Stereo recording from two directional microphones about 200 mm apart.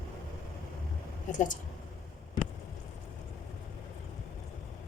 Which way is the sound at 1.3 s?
40° left (ahead or behind).